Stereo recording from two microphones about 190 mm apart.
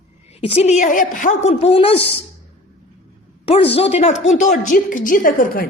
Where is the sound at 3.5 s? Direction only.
30° left (ahead or behind); by 5.7 s 50° left (ahead or behind).